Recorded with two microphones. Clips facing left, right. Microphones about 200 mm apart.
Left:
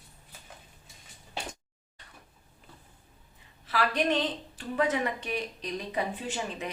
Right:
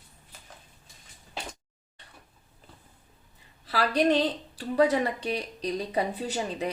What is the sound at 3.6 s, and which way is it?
Speech, 35° right (ahead or behind).